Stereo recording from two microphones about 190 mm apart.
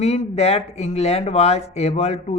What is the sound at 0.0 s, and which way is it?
Speech, 35° left (ahead or behind).